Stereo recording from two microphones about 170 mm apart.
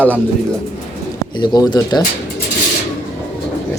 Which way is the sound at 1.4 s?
25° left (ahead or behind).